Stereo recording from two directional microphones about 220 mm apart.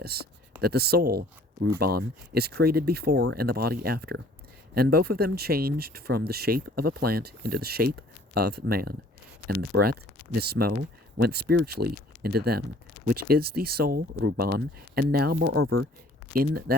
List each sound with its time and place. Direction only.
0.0 s speech: 45° right (ahead or behind)
16.3 s speech: 40° right (ahead or behind)